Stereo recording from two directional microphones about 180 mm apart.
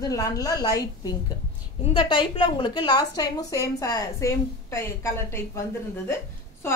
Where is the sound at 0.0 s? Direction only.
20° left (ahead or behind).